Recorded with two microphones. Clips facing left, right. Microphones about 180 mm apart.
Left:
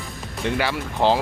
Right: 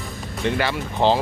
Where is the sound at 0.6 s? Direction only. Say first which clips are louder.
Left 1 dB; 10° left (ahead or behind).